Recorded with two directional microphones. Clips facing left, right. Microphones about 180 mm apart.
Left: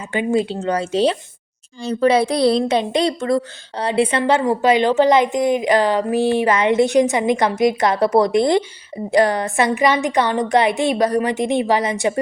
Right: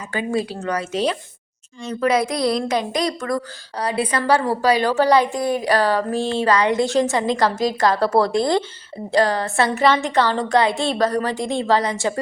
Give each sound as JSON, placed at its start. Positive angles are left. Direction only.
{"t": 0.1, "sound": "a woman's voice", "side_deg": 20}